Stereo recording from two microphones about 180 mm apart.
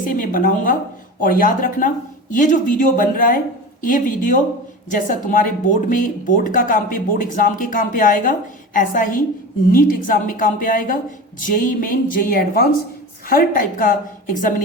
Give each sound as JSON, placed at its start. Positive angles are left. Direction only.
{"t": 0.0, "sound": "a woman's voice", "side_deg": 50}